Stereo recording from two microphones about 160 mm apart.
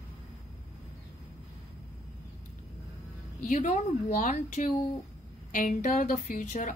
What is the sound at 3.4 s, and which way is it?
A woman's voice, 50° left (ahead or behind).